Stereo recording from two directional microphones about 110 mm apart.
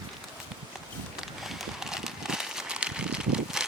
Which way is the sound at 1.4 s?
5° right (ahead or behind).